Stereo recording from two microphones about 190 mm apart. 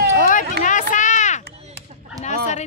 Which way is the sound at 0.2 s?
45° left (ahead or behind).